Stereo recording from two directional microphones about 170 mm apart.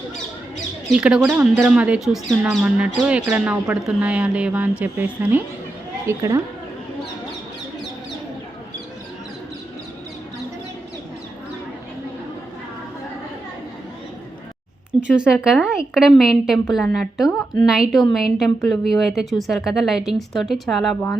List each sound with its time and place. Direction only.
0.9 s speech: 5° right (ahead or behind)
15.0 s a woman's voice: 5° right (ahead or behind)